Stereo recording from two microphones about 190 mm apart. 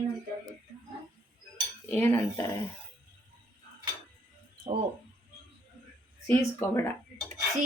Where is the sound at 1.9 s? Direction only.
15° left (ahead or behind).